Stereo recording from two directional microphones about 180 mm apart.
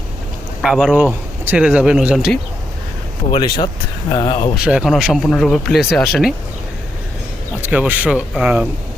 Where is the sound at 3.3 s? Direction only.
25° left (ahead or behind).